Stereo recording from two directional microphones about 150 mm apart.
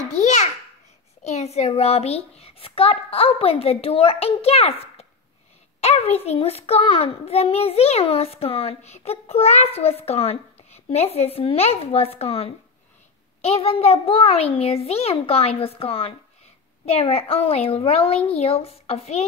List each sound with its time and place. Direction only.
0.1 s babbling: 50° left (ahead or behind)
1.2 s a child's voice: 45° left (ahead or behind)